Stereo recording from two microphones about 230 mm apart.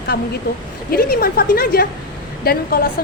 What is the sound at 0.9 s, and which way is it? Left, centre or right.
A woman's voice, left.